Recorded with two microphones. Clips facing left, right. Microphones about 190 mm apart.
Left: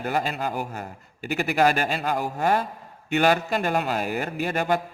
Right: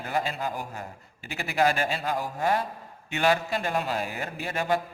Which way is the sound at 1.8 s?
60° left (ahead or behind).